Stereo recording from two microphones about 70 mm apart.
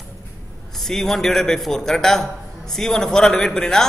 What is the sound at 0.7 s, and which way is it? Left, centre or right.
A man's voice, centre.